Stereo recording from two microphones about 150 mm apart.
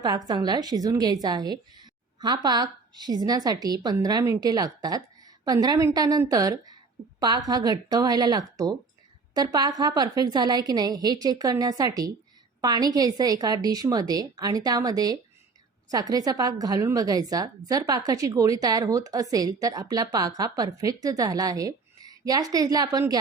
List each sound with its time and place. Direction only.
0.0 s a woman's voice: 25° right (ahead or behind)